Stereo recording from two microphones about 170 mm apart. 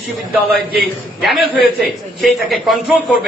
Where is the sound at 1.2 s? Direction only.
Centre (ahead or behind).